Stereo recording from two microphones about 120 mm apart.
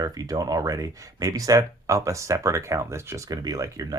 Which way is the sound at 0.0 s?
30° right (ahead or behind).